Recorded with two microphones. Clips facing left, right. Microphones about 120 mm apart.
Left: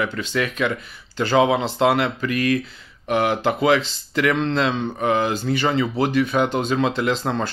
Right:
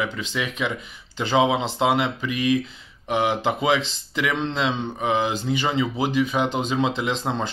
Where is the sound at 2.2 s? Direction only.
60° left (ahead or behind).